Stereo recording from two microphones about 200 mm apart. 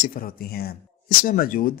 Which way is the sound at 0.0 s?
45° left (ahead or behind).